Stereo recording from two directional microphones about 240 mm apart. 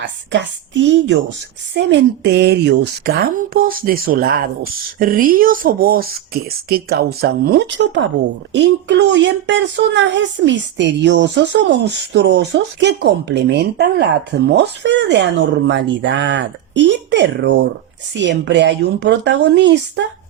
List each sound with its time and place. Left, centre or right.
0.0 s speech: right